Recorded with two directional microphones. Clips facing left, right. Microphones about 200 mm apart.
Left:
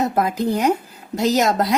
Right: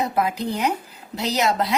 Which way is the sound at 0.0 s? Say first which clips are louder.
Left 3 dB; 45° left (ahead or behind).